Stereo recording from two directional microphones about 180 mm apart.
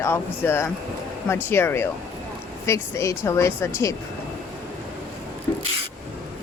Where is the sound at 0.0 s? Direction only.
15° left (ahead or behind).